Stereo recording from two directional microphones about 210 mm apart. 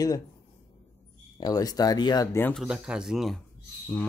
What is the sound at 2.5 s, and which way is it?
Speech, centre (ahead or behind).